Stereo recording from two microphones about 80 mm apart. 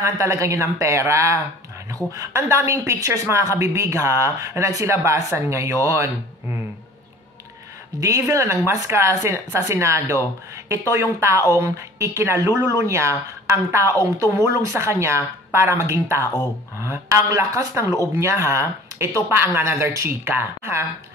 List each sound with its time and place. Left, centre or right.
0.0 s a woman's voice: right
8.0 s a woman's voice: right